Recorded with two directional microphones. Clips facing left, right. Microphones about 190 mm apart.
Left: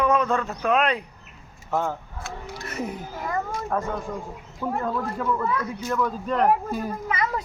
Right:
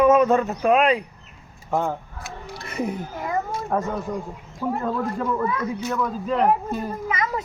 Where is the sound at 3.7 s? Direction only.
10° right (ahead or behind).